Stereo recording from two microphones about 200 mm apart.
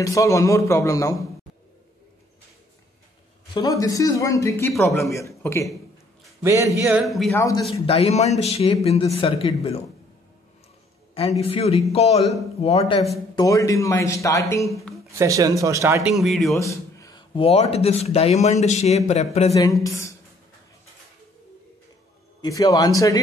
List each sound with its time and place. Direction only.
0.0 s a man's voice: 15° left (ahead or behind)
3.5 s a man's voice: 20° left (ahead or behind)
6.4 s speech: 15° right (ahead or behind)
7.0 s a man's voice: centre (ahead or behind)
7.3 s a man's voice: 15° left (ahead or behind)
7.7 s speech: 30° left (ahead or behind)
11.1 s a man's voice: 30° left (ahead or behind); by 14.4 s 15° left (ahead or behind)
14.7 s speech: centre (ahead or behind)
15.1 s speech: 15° right (ahead or behind)
16.1 s a man's voice: centre (ahead or behind)
16.5 s a sound: 15° left (ahead or behind)
17.4 s speech: 30° left (ahead or behind)
19.8 s a man's voice: 15° left (ahead or behind)
22.4 s a man's voice: 15° left (ahead or behind)